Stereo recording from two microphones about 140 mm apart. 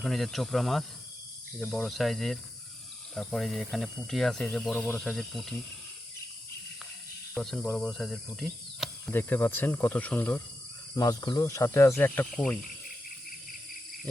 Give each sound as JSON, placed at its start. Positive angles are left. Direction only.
{"t": 0.0, "sound": "speech", "side_deg": 0}
{"t": 7.3, "sound": "speech", "side_deg": 5}
{"t": 9.0, "sound": "speech", "side_deg": 15}
{"t": 10.9, "sound": "speech", "side_deg": 25}
{"t": 12.3, "sound": "speech", "side_deg": 0}